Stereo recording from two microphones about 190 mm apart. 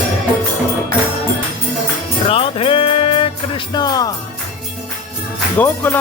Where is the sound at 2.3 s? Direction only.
30° left (ahead or behind).